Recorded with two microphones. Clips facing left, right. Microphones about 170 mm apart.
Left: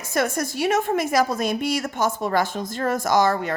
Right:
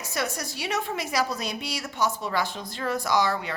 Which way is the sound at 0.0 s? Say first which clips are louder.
Left 7 dB; 50° left (ahead or behind).